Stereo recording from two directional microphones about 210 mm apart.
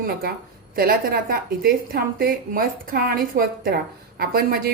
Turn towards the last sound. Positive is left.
turn(degrees=-45)  # may be behind; listen again after turning